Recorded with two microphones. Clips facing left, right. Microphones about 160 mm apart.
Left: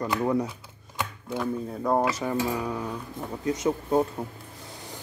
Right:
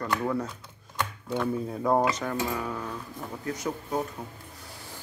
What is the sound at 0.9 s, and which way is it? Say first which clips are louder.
Cutlery: right 1 dB; centre (ahead or behind).